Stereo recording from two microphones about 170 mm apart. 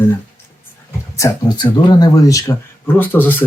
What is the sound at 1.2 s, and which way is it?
Speech, 20° left (ahead or behind).